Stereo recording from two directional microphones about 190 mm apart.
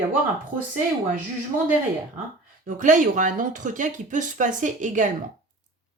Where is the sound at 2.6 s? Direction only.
45° right (ahead or behind).